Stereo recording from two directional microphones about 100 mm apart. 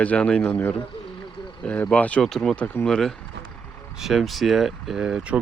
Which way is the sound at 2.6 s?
15° left (ahead or behind).